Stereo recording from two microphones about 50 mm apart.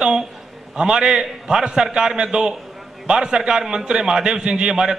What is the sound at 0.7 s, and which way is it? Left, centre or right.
A man's voice, centre.